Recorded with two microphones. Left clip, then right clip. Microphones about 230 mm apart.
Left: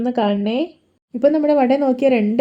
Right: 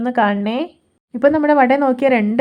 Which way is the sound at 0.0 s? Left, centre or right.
Centre.